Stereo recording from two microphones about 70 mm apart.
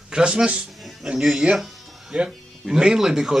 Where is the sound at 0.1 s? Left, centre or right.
Centre.